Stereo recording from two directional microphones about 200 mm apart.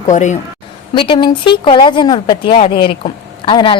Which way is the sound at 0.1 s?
35° left (ahead or behind).